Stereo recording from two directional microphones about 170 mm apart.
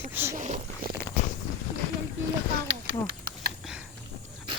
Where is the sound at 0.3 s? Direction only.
45° right (ahead or behind).